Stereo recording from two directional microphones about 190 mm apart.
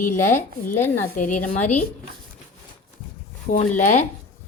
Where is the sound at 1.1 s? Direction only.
45° left (ahead or behind).